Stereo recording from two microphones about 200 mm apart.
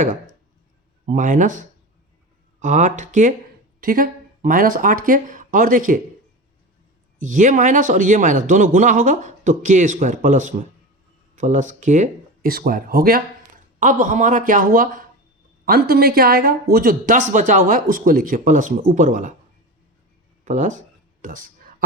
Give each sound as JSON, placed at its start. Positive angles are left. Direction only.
{"t": 1.0, "sound": "a man's voice", "side_deg": -40}
{"t": 7.2, "sound": "a man's voice", "side_deg": -40}
{"t": 20.4, "sound": "a sound", "side_deg": -40}